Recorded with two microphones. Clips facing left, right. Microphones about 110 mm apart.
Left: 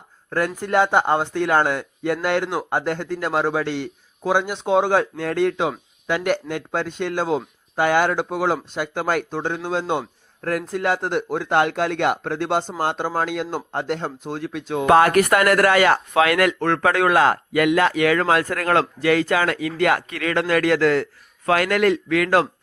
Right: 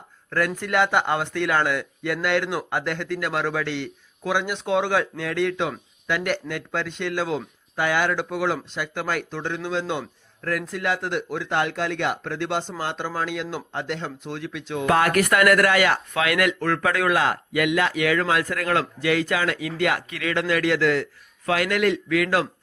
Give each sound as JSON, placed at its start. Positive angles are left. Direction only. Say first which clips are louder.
{"t": 0.3, "sound": "a man's voice", "louder": "left 2 dB", "side_deg": 35}
{"t": 14.8, "sound": "a man's voice", "louder": "left 5 dB", "side_deg": 30}